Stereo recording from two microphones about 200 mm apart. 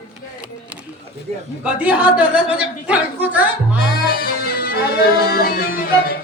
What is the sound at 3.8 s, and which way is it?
Music, 50° left (ahead or behind).